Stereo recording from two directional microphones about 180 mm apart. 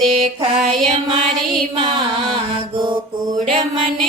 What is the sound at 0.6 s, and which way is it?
Music, centre (ahead or behind).